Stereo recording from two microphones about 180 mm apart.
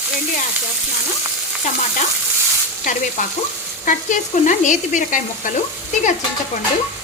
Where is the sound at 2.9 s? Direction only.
45° left (ahead or behind).